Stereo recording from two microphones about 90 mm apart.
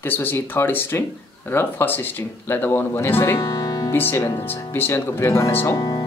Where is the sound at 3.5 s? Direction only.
40° left (ahead or behind).